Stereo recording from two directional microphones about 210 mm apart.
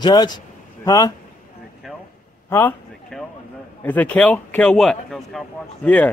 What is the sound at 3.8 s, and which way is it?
A man's voice, 10° left (ahead or behind).